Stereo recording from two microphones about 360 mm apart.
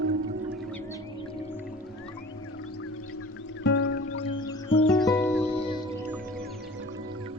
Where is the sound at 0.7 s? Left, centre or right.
Centre.